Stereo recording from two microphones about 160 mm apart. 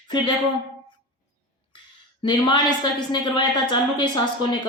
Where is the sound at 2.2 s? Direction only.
30° left (ahead or behind).